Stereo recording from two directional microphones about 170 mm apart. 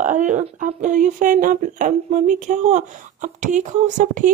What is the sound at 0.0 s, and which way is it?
Speech, 50° right (ahead or behind).